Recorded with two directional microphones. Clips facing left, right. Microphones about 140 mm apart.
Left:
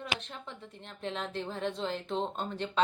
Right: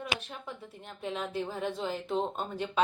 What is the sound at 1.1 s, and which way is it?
Speech, 5° right (ahead or behind).